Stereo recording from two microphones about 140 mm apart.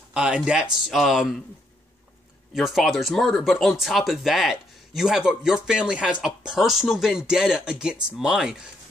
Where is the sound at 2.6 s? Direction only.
Centre (ahead or behind).